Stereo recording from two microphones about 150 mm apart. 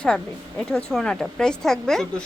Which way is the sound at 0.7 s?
5° left (ahead or behind).